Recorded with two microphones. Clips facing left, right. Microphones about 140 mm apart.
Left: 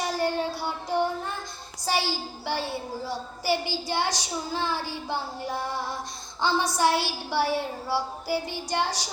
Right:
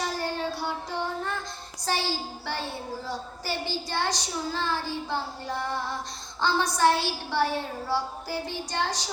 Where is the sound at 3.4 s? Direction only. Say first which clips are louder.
Left 6 dB; 10° left (ahead or behind).